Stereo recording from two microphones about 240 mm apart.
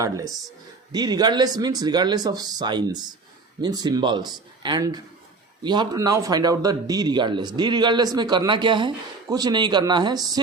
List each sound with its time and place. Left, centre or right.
0.0 s speech: centre